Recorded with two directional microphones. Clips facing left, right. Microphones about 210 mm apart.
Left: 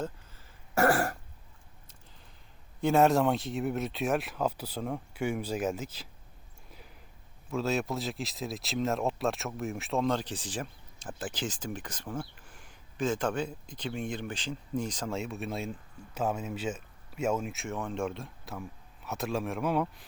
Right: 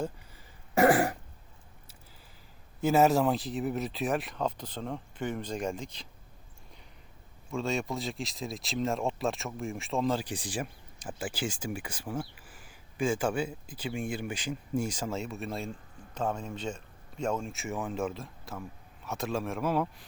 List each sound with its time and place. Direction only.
0.0 s throat clearing: 15° right (ahead or behind)
2.8 s speech: 5° right (ahead or behind)
7.5 s speech: centre (ahead or behind)